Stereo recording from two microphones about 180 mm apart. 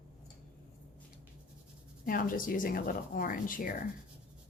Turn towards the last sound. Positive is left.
turn(degrees=50)  # may be behind; listen again after turning